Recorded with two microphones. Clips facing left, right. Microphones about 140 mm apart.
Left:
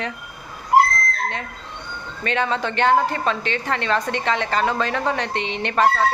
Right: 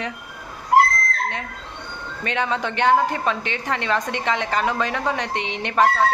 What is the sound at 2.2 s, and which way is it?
A woman's voice, 15° right (ahead or behind).